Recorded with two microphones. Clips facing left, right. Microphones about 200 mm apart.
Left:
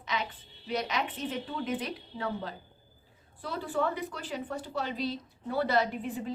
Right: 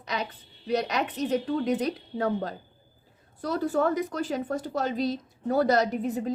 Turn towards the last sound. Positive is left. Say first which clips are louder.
# right 6 dB
turn(degrees=-40)  # may be behind; listen again after turning